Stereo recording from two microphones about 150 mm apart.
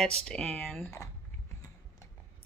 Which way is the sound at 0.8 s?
20° left (ahead or behind).